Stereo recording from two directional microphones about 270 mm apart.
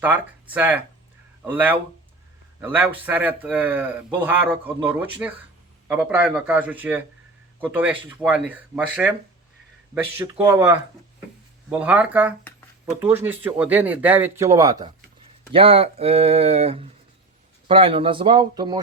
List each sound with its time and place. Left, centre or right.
0.0 s speech: centre
10.3 s speech: centre